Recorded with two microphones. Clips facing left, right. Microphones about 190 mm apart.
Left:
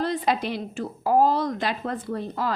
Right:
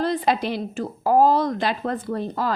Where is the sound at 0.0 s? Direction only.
35° right (ahead or behind).